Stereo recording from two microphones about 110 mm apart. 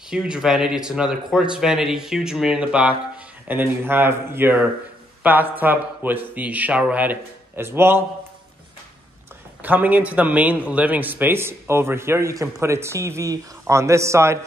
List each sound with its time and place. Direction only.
0.1 s a man's voice: 5° right (ahead or behind)
9.6 s a man's voice: 15° right (ahead or behind)